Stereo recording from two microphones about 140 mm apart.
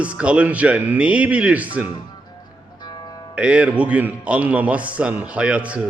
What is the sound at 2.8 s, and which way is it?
Music, 30° left (ahead or behind).